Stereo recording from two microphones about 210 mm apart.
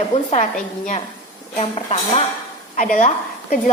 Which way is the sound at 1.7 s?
30° left (ahead or behind).